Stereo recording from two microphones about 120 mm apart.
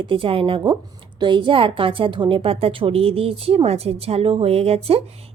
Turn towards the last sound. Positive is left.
turn(degrees=-55)  # may be behind; listen again after turning